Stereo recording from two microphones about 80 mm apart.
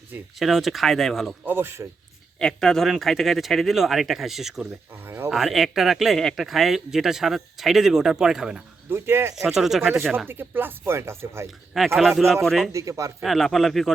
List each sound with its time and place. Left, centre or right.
0.3 s speech: centre
1.5 s speech: right
2.4 s speech: centre
5.0 s a sound: right
5.3 s speech: centre
8.9 s speech: right
9.3 s speech: centre
10.2 s speech: right
11.9 s speech: centre
12.7 s speech: right
13.2 s speech: centre